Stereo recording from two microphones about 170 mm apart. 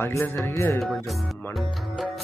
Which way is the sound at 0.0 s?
10° left (ahead or behind).